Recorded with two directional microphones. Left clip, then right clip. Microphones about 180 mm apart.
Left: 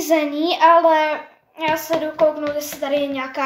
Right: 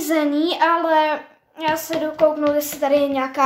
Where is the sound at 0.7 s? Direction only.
45° right (ahead or behind).